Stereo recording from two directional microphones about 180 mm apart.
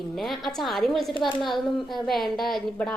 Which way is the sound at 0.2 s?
Centre (ahead or behind).